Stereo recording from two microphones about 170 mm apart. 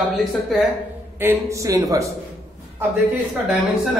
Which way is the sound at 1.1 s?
15° right (ahead or behind).